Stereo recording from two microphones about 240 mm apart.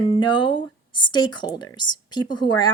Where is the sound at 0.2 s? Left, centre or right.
Centre.